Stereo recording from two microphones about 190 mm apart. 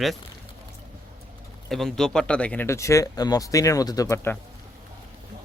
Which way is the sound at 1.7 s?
Centre (ahead or behind).